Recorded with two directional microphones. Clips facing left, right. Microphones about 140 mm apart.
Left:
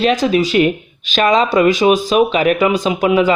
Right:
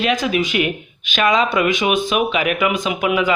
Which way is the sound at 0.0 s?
40° left (ahead or behind).